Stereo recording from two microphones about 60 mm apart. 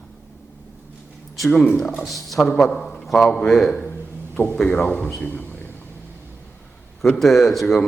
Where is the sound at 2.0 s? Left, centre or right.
Centre.